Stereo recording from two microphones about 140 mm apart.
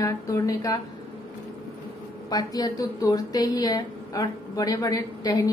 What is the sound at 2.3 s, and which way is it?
A woman's voice, 25° left (ahead or behind).